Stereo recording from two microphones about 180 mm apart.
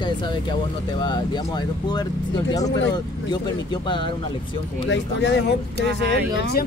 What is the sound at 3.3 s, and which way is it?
Speech, 25° left (ahead or behind).